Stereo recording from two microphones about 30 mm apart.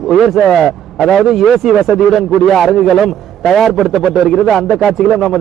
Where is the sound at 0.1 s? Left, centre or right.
Centre.